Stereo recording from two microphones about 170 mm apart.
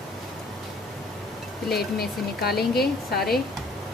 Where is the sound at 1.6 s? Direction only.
70° left (ahead or behind).